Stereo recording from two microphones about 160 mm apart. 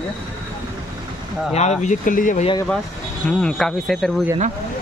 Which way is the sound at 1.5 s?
45° left (ahead or behind).